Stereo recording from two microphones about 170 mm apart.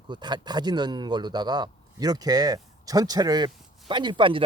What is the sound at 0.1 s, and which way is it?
Speech, 25° right (ahead or behind).